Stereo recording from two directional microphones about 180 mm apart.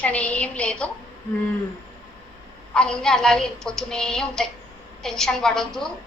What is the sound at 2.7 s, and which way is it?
A woman's voice, 5° left (ahead or behind).